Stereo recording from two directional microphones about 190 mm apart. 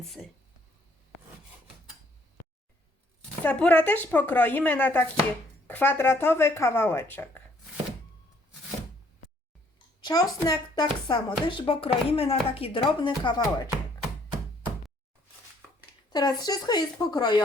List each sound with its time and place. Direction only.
3.4 s speech: 5° left (ahead or behind)
9.7 s speech: 20° left (ahead or behind)
16.1 s speech: 20° left (ahead or behind)